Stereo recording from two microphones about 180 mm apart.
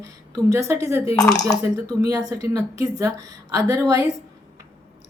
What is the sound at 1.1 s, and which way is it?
Speech, 20° left (ahead or behind).